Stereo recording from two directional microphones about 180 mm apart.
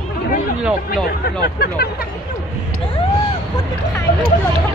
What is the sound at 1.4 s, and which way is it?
Speech, 60° left (ahead or behind).